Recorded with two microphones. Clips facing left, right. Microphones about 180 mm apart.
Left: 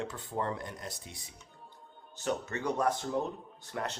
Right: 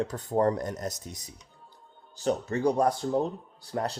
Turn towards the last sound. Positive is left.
turn(degrees=-35)  # may be behind; listen again after turning